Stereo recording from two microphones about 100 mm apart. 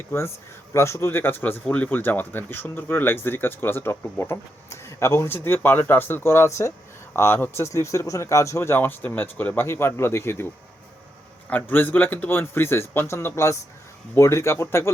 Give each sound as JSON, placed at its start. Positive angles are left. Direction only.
{"t": 0.7, "sound": "speech", "side_deg": 25}